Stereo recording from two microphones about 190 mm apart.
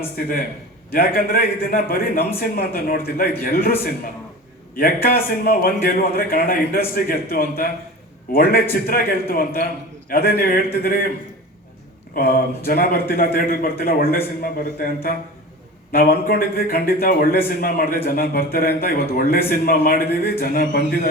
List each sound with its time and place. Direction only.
0.9 s a man's voice: 50° left (ahead or behind)
4.8 s a man's voice: 50° left (ahead or behind)
12.1 s a man's voice: 50° left (ahead or behind)